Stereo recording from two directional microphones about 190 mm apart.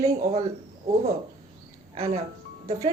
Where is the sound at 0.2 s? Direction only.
40° right (ahead or behind).